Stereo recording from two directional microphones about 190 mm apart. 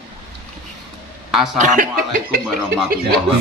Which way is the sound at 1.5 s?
40° right (ahead or behind).